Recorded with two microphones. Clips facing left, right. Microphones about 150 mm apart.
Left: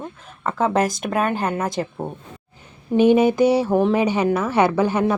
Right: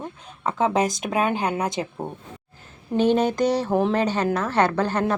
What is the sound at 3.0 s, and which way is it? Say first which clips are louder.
Mantra: left 5 dB; 10° left (ahead or behind).